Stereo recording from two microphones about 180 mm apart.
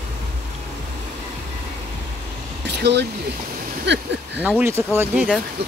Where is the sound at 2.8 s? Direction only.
70° right (ahead or behind).